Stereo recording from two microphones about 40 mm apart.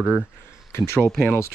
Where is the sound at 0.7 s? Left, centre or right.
Left.